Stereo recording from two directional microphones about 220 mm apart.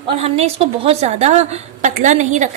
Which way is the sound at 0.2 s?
30° right (ahead or behind).